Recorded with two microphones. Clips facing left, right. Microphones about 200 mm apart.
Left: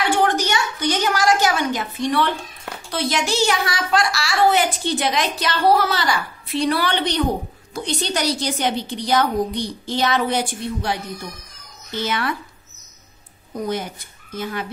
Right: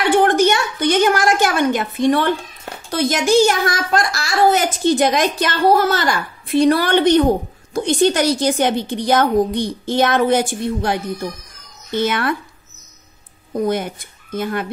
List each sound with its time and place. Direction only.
0.1 s a sound: 55° right (ahead or behind)
2.9 s a child's voice: 45° right (ahead or behind)
13.7 s speech: 55° right (ahead or behind)